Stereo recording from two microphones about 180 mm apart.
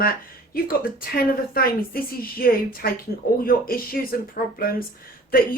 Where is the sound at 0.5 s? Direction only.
55° left (ahead or behind).